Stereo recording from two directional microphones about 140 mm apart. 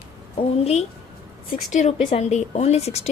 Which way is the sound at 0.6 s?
50° left (ahead or behind).